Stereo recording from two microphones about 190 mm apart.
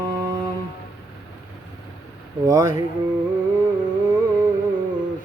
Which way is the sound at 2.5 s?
15° right (ahead or behind).